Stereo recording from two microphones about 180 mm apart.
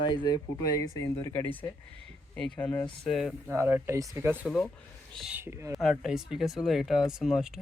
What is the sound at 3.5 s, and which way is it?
Speech, 10° right (ahead or behind).